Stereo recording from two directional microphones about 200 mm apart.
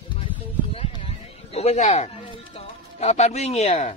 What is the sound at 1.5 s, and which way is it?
Speech, 30° left (ahead or behind).